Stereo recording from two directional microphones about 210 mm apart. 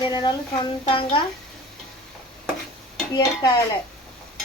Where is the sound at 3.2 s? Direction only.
20° left (ahead or behind).